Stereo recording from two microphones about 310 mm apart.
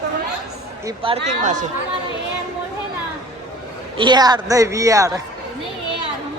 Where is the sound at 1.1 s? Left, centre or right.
Right.